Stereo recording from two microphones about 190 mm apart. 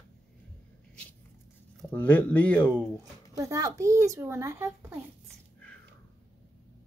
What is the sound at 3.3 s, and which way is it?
A child's voice, 15° right (ahead or behind).